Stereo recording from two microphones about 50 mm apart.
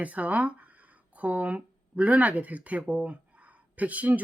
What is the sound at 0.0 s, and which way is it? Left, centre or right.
Speech, right.